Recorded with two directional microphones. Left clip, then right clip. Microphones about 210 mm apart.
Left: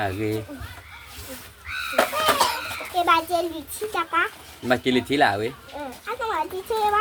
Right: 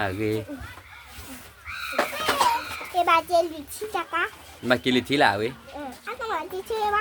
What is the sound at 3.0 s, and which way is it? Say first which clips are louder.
A child's voice: even; 5° right (ahead or behind).